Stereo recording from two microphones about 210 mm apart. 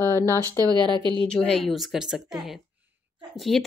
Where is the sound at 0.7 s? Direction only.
20° right (ahead or behind).